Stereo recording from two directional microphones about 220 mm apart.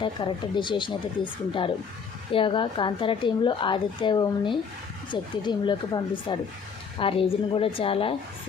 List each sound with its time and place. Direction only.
0.0 s speech: 20° left (ahead or behind)